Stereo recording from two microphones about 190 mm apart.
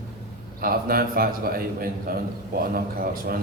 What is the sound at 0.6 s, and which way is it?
A man's voice, 50° right (ahead or behind).